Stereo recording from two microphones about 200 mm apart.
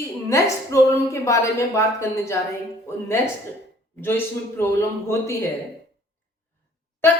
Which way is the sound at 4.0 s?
10° left (ahead or behind).